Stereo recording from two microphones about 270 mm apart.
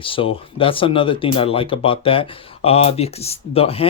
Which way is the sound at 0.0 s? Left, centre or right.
Centre.